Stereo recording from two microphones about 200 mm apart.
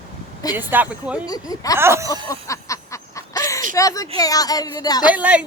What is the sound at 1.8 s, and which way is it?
Speech, 15° right (ahead or behind).